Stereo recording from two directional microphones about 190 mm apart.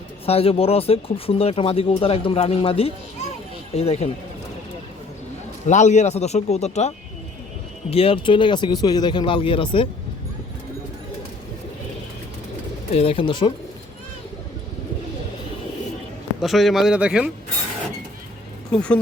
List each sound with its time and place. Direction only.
0.3 s speech: 30° left (ahead or behind)
5.6 s speech: 40° left (ahead or behind)
12.9 s speech: 30° left (ahead or behind)
16.4 s speech: centre (ahead or behind)
18.7 s speech: 5° left (ahead or behind)